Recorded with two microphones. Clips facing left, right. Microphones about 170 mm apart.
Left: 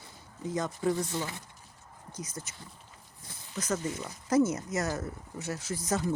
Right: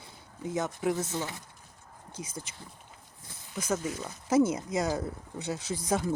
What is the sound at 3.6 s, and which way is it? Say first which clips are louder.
Speech: right 1 dB; 10° right (ahead or behind).